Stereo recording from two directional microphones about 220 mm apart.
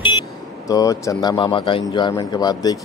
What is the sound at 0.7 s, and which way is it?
Speech, 15° left (ahead or behind).